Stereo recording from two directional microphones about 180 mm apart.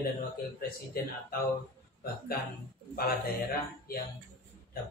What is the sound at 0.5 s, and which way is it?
Speech, 55° left (ahead or behind).